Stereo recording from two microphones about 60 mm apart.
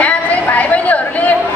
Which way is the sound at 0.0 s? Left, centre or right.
Left.